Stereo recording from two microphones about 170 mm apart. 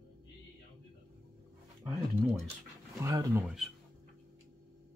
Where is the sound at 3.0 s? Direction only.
15° right (ahead or behind).